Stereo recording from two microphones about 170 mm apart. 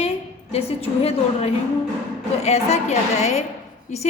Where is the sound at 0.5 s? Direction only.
35° left (ahead or behind).